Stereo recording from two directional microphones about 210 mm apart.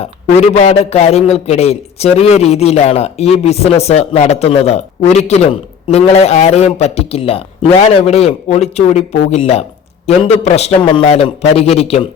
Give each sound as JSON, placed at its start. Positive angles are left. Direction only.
{"t": 0.7, "sound": "a man's voice", "side_deg": 30}